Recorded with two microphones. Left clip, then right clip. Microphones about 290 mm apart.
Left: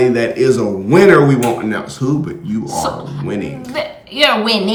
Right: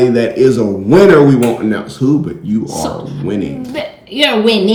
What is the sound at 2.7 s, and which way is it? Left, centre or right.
Speech, left.